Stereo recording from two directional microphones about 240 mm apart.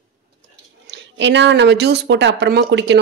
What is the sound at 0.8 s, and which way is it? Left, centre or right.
A woman's voice, right.